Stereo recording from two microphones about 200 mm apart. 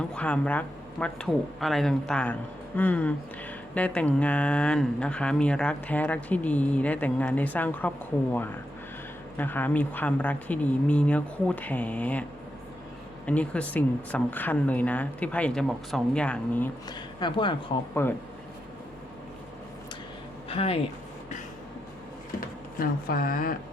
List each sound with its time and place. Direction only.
0.1 s speech: 5° left (ahead or behind)
13.2 s speech: 5° left (ahead or behind)
17.2 s speech: 25° left (ahead or behind)
20.5 s speech: 30° left (ahead or behind)
22.8 s speech: 45° left (ahead or behind)